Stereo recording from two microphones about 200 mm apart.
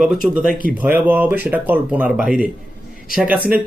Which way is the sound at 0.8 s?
10° right (ahead or behind).